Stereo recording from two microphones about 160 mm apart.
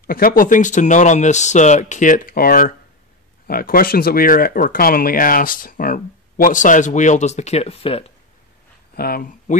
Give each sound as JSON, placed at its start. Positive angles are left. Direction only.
{"t": 0.0, "sound": "speech", "side_deg": 65}
{"t": 8.9, "sound": "speech", "side_deg": 70}